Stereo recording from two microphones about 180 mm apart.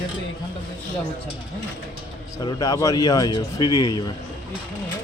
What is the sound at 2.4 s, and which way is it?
Speech, 20° left (ahead or behind).